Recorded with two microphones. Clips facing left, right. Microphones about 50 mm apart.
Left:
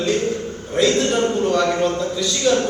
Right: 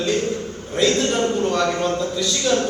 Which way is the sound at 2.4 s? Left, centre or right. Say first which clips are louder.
Left 3 dB; left.